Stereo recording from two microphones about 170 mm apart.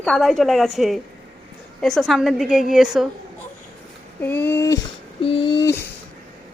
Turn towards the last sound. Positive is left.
turn(degrees=15)  # may be behind; listen again after turning